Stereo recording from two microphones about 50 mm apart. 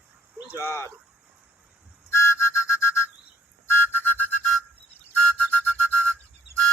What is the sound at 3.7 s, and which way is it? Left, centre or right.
Music, left.